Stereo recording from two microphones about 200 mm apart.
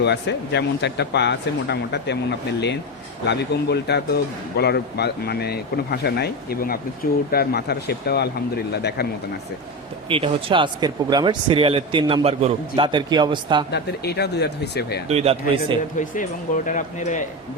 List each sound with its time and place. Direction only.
0.0 s speech: 60° left (ahead or behind)
10.1 s speech: 25° right (ahead or behind)
13.7 s speech: 55° left (ahead or behind)
15.1 s speech: 30° right (ahead or behind)
16.6 s speech: 40° left (ahead or behind)